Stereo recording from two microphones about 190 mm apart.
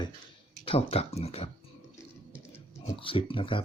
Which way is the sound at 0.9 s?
35° left (ahead or behind).